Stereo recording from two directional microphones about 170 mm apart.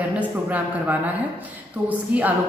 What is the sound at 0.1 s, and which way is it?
A woman's voice, 10° right (ahead or behind).